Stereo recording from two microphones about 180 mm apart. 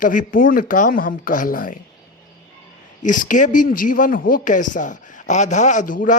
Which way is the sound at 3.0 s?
45° left (ahead or behind).